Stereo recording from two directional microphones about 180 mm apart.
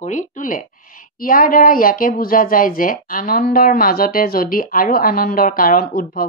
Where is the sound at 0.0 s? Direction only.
45° left (ahead or behind).